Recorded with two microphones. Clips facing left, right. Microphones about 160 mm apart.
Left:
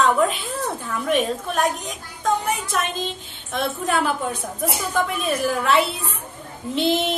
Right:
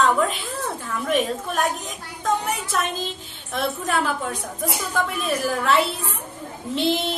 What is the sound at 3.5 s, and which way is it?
A woman's voice, centre (ahead or behind).